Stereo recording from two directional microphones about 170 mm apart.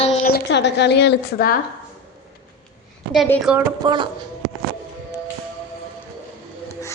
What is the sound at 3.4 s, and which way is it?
Speech, 5° right (ahead or behind).